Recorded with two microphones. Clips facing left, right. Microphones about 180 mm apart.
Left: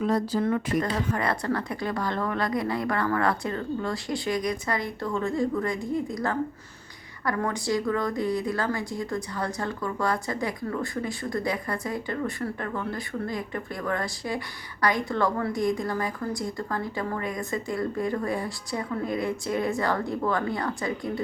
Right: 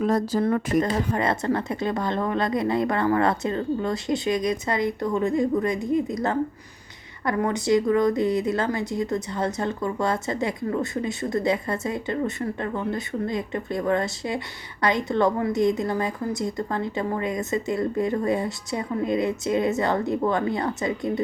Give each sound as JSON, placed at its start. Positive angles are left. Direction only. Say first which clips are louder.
{"t": 0.0, "sound": "speech", "louder": "right 3 dB", "side_deg": -45}
{"t": 0.9, "sound": "a woman's voice", "louder": "right 3 dB", "side_deg": -25}